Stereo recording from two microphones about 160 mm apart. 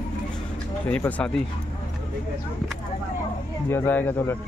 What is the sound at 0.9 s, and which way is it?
Speech, 5° left (ahead or behind).